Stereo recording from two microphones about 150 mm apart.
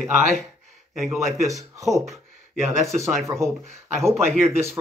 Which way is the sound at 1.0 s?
Centre (ahead or behind).